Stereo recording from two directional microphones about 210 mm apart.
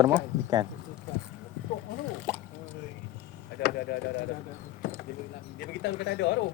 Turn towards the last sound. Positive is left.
turn(degrees=55)  # may be behind; listen again after turning